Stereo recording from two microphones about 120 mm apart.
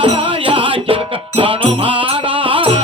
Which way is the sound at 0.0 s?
50° right (ahead or behind).